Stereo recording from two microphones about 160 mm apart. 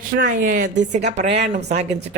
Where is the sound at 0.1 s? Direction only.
55° right (ahead or behind).